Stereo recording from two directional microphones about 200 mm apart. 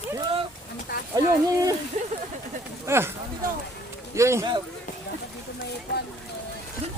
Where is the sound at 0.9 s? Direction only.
50° left (ahead or behind).